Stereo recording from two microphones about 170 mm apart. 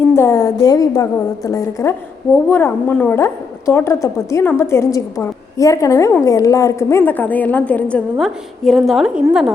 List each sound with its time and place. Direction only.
0.1 s a woman's voice: 15° left (ahead or behind); by 9.5 s 5° right (ahead or behind)